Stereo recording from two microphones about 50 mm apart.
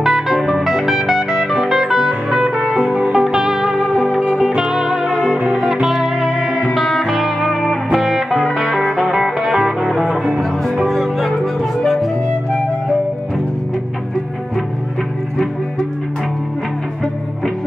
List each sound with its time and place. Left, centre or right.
0.0 s music: centre
2.7 s music: right
3.1 s music: centre
4.1 s music: centre
4.5 s music: centre
5.0 s music: centre
5.5 s music: centre
6.2 s music: centre